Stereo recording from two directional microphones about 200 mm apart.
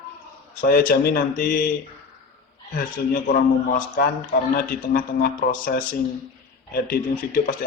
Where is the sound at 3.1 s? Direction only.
45° left (ahead or behind).